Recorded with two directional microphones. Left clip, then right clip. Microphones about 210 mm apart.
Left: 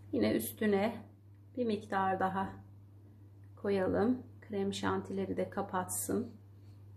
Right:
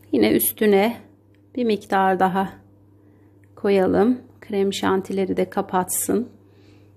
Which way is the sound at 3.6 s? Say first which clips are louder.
Right 14 dB; 45° right (ahead or behind).